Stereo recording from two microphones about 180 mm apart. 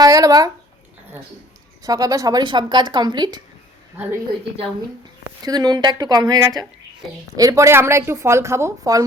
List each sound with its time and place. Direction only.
0.0 s a sound: 20° right (ahead or behind)
1.8 s a woman's voice: 20° right (ahead or behind)
5.4 s a woman's voice: 20° right (ahead or behind)